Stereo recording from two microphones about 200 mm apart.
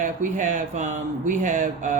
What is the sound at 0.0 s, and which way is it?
Speech, 40° right (ahead or behind).